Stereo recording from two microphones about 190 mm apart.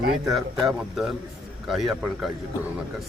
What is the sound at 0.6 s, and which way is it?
Speech, centre (ahead or behind).